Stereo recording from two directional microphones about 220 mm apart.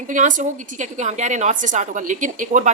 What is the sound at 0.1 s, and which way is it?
Speech, 35° right (ahead or behind).